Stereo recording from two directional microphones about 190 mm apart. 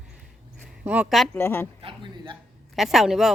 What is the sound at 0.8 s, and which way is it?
Speech, 5° right (ahead or behind).